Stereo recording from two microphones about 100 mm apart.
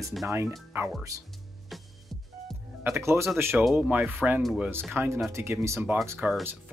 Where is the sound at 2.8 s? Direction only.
25° right (ahead or behind).